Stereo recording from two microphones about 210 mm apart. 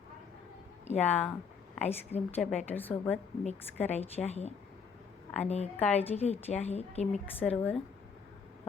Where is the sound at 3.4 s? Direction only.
30° left (ahead or behind).